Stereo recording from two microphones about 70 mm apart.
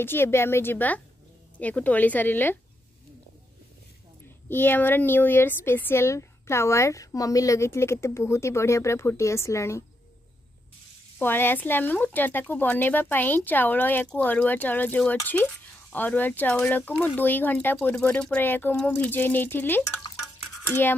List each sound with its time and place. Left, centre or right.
0.0 s speech: left
4.5 s speech: left
11.1 s speech: left